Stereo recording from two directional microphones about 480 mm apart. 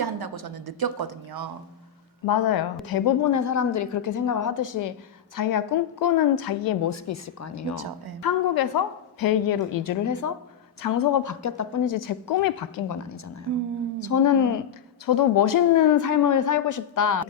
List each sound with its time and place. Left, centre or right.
0.0 s speech: right
2.2 s a woman's voice: left
8.2 s a woman's voice: left
14.0 s a woman's voice: left